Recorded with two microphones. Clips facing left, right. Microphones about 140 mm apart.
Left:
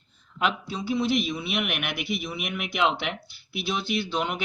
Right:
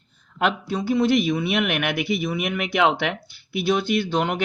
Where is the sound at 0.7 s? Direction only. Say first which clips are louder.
Right 8 dB; 50° right (ahead or behind).